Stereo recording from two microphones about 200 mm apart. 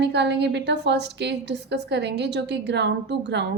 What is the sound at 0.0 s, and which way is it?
A woman's voice, 60° right (ahead or behind).